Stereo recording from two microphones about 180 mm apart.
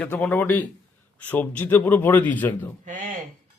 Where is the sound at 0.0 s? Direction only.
5° left (ahead or behind).